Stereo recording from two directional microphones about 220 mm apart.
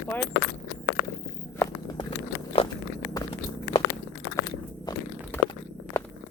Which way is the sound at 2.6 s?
25° left (ahead or behind).